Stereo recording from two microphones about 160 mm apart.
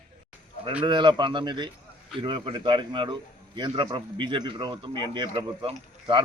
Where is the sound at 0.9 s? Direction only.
30° right (ahead or behind).